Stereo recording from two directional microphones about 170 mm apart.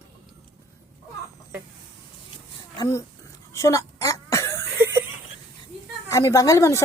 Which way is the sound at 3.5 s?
20° left (ahead or behind).